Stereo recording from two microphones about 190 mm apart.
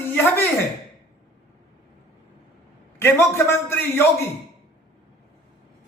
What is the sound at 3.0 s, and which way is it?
A man's voice, 15° left (ahead or behind).